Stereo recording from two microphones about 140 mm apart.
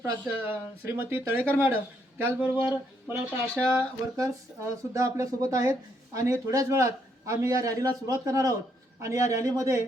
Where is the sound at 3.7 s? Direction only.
20° right (ahead or behind).